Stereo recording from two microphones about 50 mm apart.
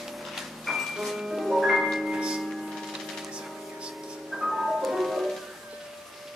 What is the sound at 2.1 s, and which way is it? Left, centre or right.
Music, centre.